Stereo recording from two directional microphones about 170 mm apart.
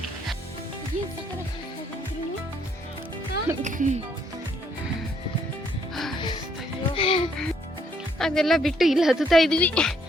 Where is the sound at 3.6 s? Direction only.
45° right (ahead or behind).